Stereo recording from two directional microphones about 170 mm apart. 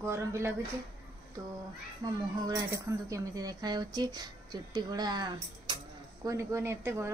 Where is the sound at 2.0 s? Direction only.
20° right (ahead or behind).